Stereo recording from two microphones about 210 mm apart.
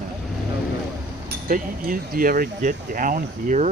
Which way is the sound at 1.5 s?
40° right (ahead or behind).